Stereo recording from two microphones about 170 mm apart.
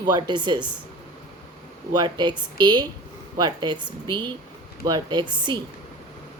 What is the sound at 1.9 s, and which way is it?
A woman's voice, 25° right (ahead or behind).